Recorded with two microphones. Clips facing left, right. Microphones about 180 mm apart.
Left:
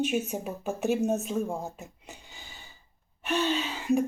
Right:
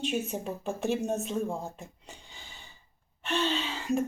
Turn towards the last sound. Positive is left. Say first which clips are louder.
# left 3 dB
turn(degrees=0)  # may be behind; listen again after turning